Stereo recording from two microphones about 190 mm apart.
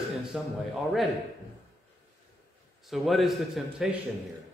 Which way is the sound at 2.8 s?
Centre (ahead or behind).